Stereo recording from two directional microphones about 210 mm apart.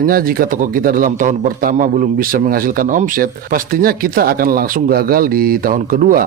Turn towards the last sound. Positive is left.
turn(degrees=-40)  # may be behind; listen again after turning